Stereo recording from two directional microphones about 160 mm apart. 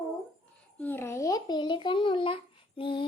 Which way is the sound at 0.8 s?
15° left (ahead or behind).